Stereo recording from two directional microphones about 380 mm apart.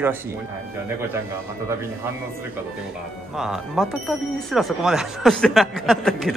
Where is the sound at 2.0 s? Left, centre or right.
Centre.